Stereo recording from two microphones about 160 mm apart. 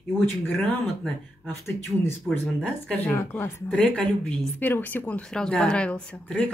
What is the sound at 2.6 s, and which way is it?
A woman's voice, 10° left (ahead or behind).